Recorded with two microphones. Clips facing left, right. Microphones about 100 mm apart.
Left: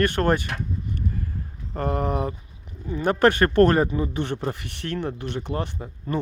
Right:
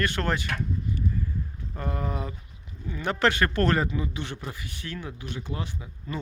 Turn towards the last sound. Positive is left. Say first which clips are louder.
# left 5 dB
turn(degrees=50)  # may be behind; listen again after turning